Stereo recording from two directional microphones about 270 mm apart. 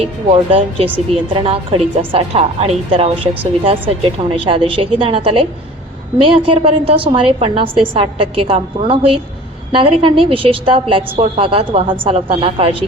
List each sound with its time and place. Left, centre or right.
0.0 s a woman's voice: right